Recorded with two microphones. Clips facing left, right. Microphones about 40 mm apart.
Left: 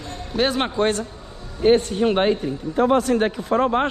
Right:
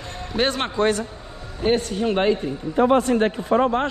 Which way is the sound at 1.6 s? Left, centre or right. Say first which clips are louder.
Left 4 dB; left.